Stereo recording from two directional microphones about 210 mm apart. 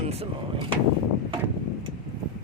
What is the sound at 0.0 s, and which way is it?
Speech, 30° right (ahead or behind).